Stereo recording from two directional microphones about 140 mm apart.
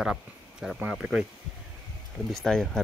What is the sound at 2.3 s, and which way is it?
Speech, 5° left (ahead or behind).